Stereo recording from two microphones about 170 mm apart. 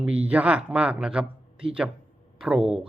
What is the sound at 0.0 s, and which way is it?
Speech, 5° right (ahead or behind).